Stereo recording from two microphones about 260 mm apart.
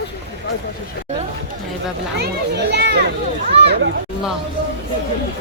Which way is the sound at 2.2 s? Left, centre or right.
Right.